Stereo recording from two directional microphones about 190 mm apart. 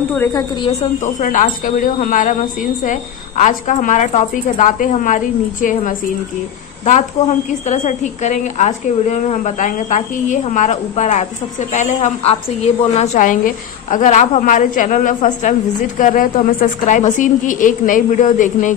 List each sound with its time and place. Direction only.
0.1 s a woman's voice: 10° left (ahead or behind)
0.6 s a woman's voice: 35° left (ahead or behind)